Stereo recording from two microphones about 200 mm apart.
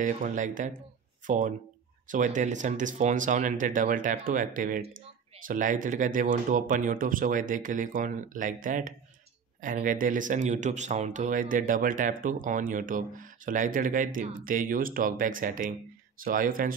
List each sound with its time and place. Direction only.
0.0 s speech: 40° right (ahead or behind)